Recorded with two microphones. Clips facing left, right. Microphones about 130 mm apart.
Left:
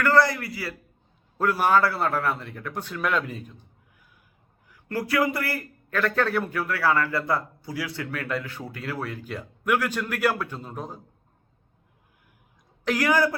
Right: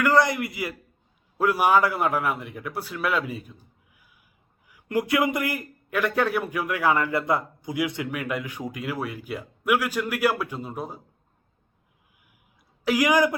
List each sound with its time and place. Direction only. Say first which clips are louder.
0.0 s a man's voice: even; 15° right (ahead or behind)
12.8 s a man's voice: right 2 dB; 10° right (ahead or behind)